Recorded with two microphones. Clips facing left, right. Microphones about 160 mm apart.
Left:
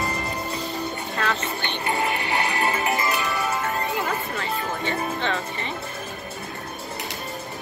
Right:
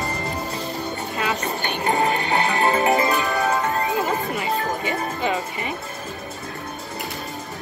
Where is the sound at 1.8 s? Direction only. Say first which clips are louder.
Right 5 dB; 35° right (ahead or behind).